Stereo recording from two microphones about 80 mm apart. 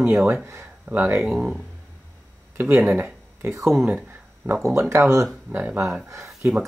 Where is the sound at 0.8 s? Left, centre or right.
Right.